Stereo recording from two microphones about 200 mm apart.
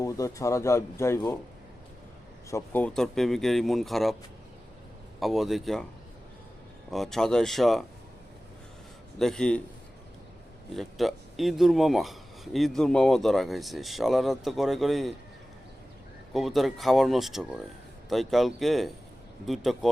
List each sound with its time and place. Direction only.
0.0 s speech: 15° left (ahead or behind)
2.5 s speech: 10° left (ahead or behind)
5.2 s speech: centre (ahead or behind)
6.9 s speech: centre (ahead or behind)
9.1 s speech: 5° left (ahead or behind)
10.8 s speech: centre (ahead or behind)
16.3 s speech: centre (ahead or behind)